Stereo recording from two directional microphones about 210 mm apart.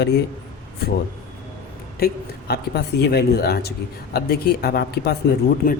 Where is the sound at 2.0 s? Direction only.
50° left (ahead or behind).